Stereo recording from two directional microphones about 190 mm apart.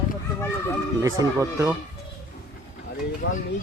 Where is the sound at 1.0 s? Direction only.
15° right (ahead or behind).